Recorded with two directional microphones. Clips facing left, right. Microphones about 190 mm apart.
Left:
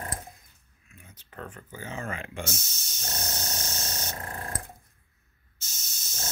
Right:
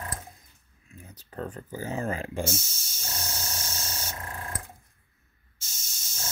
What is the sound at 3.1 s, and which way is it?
Spray, 35° left (ahead or behind).